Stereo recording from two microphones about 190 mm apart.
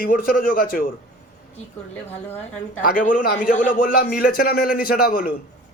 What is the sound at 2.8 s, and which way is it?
Speech, 45° left (ahead or behind).